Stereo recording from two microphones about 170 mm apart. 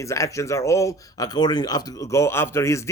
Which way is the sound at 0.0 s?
20° left (ahead or behind).